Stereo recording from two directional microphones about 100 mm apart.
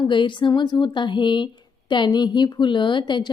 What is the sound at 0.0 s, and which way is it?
Speech, 55° left (ahead or behind).